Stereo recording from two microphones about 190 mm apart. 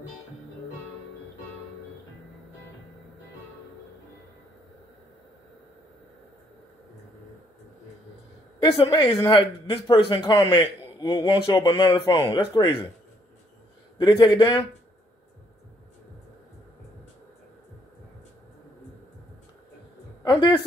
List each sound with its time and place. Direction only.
8.5 s speech: 30° left (ahead or behind)
13.9 s speech: 20° left (ahead or behind)